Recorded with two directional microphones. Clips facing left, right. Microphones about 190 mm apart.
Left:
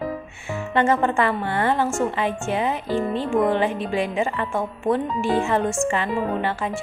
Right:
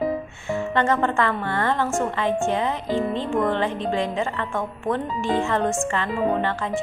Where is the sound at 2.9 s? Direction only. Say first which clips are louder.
Even; 15° right (ahead or behind).